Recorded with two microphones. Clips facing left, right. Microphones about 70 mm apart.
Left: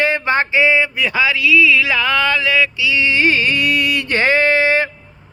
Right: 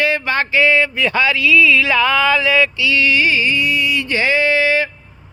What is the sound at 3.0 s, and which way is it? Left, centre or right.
Music, left.